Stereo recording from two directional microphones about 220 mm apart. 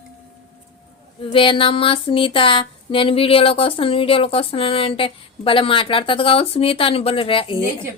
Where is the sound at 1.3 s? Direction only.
25° left (ahead or behind).